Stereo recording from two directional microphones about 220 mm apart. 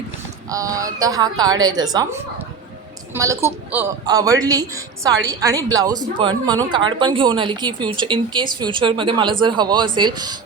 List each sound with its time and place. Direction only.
0.5 s a woman's voice: 15° right (ahead or behind)